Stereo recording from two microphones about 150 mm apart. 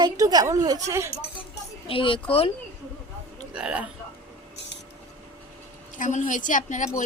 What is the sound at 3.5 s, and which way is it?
Speech, 5° right (ahead or behind).